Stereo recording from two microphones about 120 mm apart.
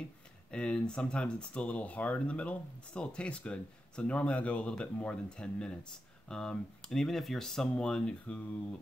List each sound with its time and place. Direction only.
0.5 s speech: 10° left (ahead or behind)